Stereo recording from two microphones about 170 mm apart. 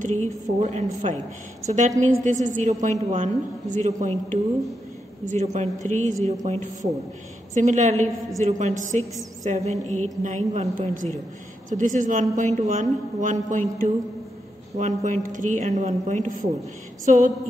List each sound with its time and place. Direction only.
0.0 s a woman's voice: 45° right (ahead or behind)